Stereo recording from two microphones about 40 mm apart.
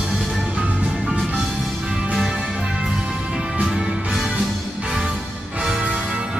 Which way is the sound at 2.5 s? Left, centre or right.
Right.